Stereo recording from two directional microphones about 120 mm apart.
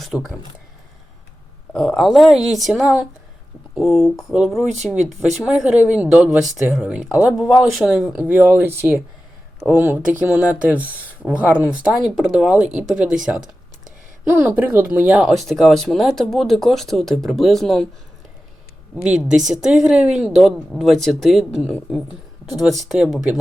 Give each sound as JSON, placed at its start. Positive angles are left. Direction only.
{"t": 0.0, "sound": "speech", "side_deg": 0}
{"t": 1.7, "sound": "speech", "side_deg": 5}
{"t": 14.3, "sound": "speech", "side_deg": -15}
{"t": 15.2, "sound": "speech", "side_deg": 0}
{"t": 19.0, "sound": "speech", "side_deg": -5}
{"t": 22.9, "sound": "speech", "side_deg": 0}